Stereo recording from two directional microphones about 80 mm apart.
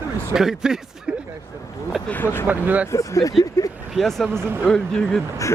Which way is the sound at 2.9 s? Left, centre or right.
Left.